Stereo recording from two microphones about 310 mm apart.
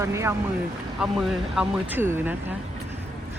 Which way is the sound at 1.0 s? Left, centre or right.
Centre.